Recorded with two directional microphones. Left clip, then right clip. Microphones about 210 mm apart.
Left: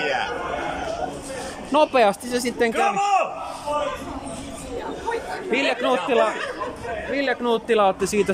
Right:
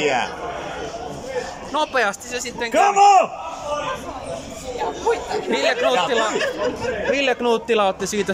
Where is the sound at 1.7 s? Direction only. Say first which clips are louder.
Left 3 dB; 15° left (ahead or behind).